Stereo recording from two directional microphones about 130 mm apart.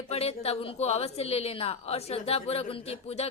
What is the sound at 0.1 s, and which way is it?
A woman's voice, 50° left (ahead or behind).